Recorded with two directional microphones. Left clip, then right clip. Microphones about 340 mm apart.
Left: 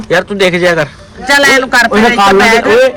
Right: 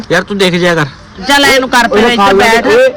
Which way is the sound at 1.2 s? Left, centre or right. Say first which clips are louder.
Even; right.